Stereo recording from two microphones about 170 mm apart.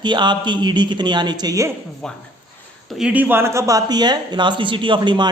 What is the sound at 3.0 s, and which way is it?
A man's voice, 10° right (ahead or behind).